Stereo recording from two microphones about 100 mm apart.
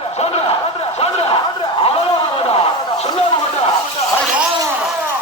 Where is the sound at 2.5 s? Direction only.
90° left.